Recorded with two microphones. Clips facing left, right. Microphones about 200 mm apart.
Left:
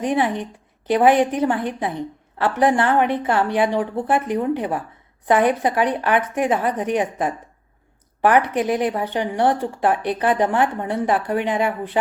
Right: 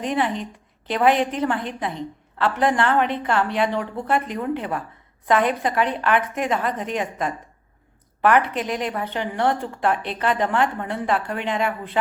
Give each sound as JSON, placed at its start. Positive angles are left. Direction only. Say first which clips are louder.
{"t": 0.0, "sound": "speech", "louder": "left 3 dB", "side_deg": 15}